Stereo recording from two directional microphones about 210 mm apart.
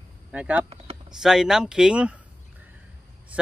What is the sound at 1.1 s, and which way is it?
Chime, centre (ahead or behind).